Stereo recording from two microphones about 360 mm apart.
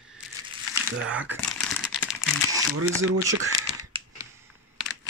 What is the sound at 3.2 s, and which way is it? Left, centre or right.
Camera, centre.